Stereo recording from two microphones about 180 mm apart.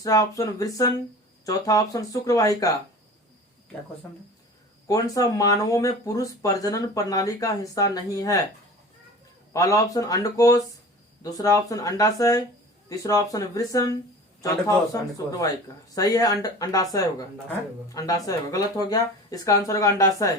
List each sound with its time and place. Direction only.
0.0 s speech: 20° left (ahead or behind)
4.9 s speech: 20° left (ahead or behind)
9.5 s speech: 20° left (ahead or behind)
14.9 s speech: 15° left (ahead or behind)